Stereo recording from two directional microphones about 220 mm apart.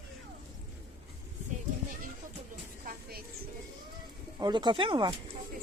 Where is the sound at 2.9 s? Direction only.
40° right (ahead or behind).